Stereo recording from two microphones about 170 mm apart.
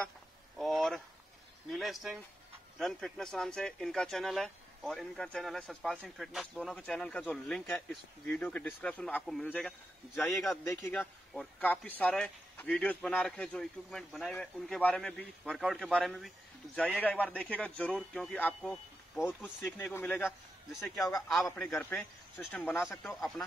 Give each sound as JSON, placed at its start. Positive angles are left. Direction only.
{"t": 0.6, "sound": "speech", "side_deg": 0}
{"t": 10.7, "sound": "speech", "side_deg": 15}
{"t": 11.0, "sound": "speech", "side_deg": 5}
{"t": 19.8, "sound": "speech", "side_deg": 10}
{"t": 21.5, "sound": "speech", "side_deg": 0}